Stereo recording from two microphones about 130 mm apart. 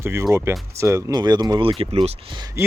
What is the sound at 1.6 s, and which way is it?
Speech, 40° right (ahead or behind).